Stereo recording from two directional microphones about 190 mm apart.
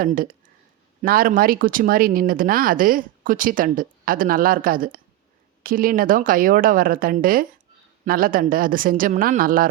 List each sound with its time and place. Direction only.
0.0 s speech: 50° right (ahead or behind)